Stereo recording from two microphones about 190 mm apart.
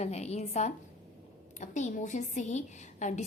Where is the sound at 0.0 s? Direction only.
35° left (ahead or behind).